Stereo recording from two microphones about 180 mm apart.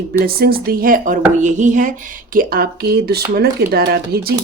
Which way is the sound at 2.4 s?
55° right (ahead or behind).